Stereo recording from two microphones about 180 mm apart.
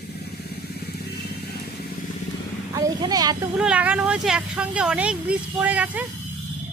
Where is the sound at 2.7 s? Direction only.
20° right (ahead or behind).